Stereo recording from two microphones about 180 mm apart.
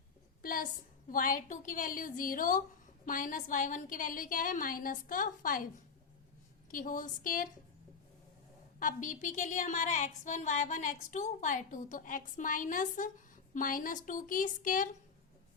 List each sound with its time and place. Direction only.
0.4 s a woman's voice: 50° left (ahead or behind)
6.7 s a woman's voice: 50° left (ahead or behind)
8.8 s a woman's voice: 45° left (ahead or behind)